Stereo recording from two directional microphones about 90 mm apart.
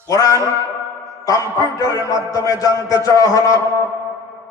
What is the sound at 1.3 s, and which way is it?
A man's voice, 40° left (ahead or behind).